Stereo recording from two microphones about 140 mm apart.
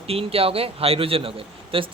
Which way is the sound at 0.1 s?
45° right (ahead or behind).